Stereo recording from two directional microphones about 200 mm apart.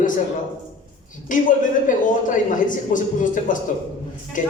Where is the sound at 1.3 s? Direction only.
40° left (ahead or behind).